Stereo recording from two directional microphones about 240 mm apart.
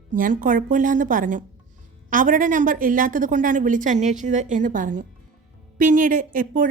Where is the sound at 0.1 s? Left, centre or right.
Right.